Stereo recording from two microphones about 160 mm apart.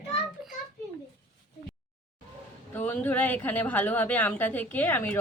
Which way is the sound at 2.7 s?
10° left (ahead or behind).